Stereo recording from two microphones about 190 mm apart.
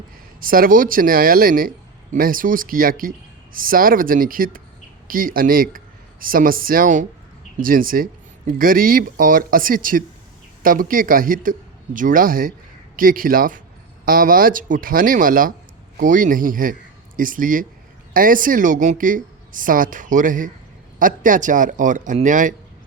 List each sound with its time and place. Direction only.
0.3 s a man's voice: 50° right (ahead or behind)